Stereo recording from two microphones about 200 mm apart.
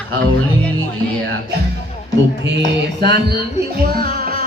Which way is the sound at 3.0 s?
55° right (ahead or behind).